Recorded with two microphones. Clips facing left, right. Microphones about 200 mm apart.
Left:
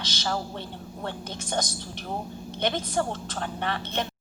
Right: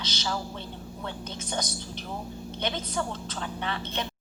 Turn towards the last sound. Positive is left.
turn(degrees=50)  # may be behind; listen again after turning